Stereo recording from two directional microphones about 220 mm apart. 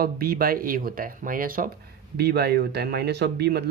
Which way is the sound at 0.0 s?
45° right (ahead or behind).